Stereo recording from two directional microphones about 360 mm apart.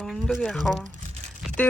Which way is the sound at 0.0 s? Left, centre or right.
Centre.